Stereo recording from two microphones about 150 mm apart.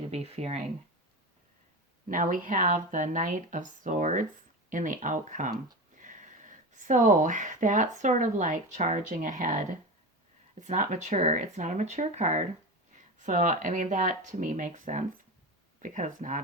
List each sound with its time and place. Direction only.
0.0 s speech: 45° right (ahead or behind)
2.0 s speech: 65° right (ahead or behind)